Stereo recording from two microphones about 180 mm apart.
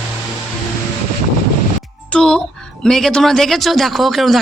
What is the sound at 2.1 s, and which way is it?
Speech, 5° left (ahead or behind).